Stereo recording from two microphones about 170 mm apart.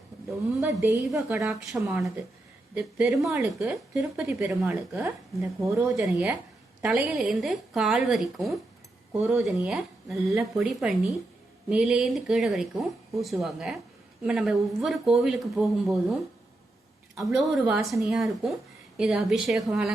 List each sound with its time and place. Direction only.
0.3 s a woman's voice: 15° right (ahead or behind)
1.5 s a woman's voice: centre (ahead or behind); by 5.9 s 15° right (ahead or behind)
6.0 s speech: 5° right (ahead or behind)
17.2 s speech: centre (ahead or behind)